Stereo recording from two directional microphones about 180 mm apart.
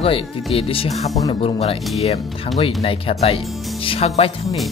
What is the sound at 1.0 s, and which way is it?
Speech, 20° left (ahead or behind).